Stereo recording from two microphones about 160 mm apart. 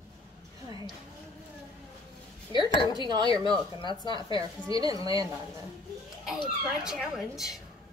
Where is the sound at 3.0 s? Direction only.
25° right (ahead or behind).